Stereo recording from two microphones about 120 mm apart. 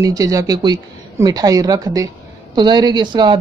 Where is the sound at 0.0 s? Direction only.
30° right (ahead or behind).